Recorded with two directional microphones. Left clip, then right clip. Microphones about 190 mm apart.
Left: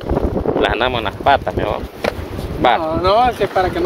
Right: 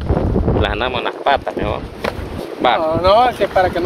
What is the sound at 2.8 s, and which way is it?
Speech, 35° right (ahead or behind).